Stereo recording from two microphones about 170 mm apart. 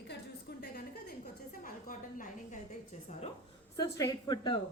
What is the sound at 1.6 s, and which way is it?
Speech, 55° left (ahead or behind).